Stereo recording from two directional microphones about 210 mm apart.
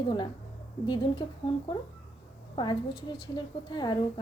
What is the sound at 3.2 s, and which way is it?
A woman's voice, 20° left (ahead or behind).